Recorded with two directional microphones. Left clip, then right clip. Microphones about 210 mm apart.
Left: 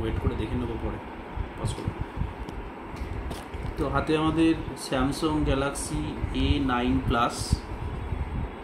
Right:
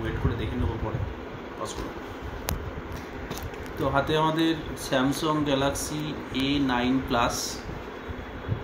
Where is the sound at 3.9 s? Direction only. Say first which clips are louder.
Right 1 dB; 35° left (ahead or behind).